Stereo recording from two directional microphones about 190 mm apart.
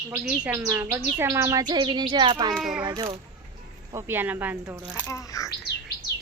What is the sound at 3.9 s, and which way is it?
Speech, 10° right (ahead or behind).